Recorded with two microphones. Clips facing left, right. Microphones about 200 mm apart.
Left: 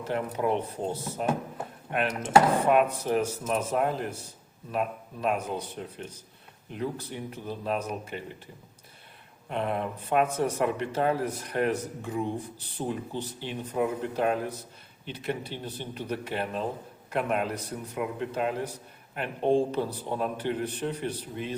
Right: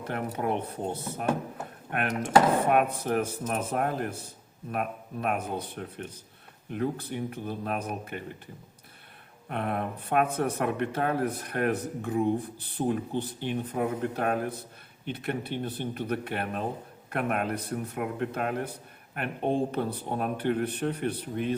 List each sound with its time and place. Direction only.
0.1 s speech: 50° right (ahead or behind)
2.6 s speech: 55° right (ahead or behind)
9.5 s speech: 55° right (ahead or behind)